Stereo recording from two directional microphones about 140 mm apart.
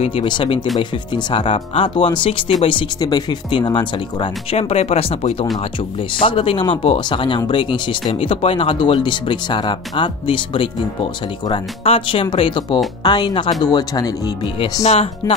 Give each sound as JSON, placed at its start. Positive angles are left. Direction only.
{"t": 0.0, "sound": "speech", "side_deg": 40}
{"t": 14.9, "sound": "speech", "side_deg": 45}